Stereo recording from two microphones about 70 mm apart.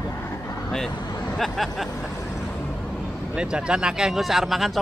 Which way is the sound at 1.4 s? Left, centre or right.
Centre.